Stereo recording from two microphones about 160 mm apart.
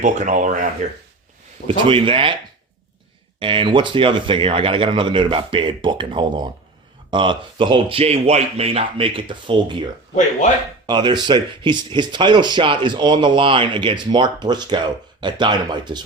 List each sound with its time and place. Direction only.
0.0 s speech: 50° right (ahead or behind)
1.6 s speech: 35° right (ahead or behind)
3.4 s speech: 35° right (ahead or behind)
10.8 s speech: 30° right (ahead or behind)